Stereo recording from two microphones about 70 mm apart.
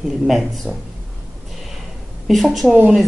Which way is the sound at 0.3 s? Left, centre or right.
Centre.